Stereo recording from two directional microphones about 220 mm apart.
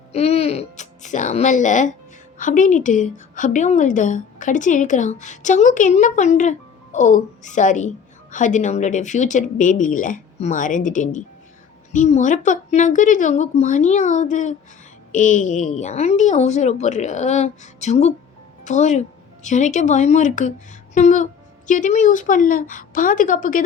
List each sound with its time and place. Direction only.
0.1 s music: 30° left (ahead or behind)
2.4 s a woman's voice: 35° left (ahead or behind)